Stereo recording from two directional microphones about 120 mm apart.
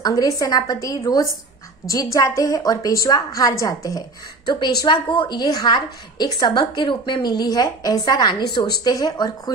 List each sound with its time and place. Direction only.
0.0 s a woman's voice: 30° left (ahead or behind)
4.6 s a woman's voice: 40° left (ahead or behind)